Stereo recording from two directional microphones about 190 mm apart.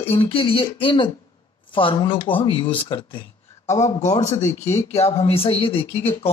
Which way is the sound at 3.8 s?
35° left (ahead or behind).